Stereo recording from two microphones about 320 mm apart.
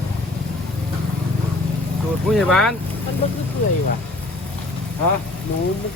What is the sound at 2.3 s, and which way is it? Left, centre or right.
Speech, centre.